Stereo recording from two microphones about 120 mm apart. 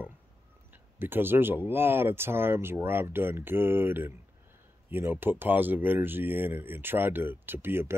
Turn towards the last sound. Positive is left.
turn(degrees=-20)  # may be behind; listen again after turning